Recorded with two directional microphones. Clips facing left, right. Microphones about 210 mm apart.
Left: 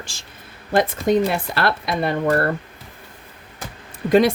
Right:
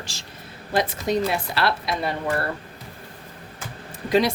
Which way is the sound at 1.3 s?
50° left (ahead or behind).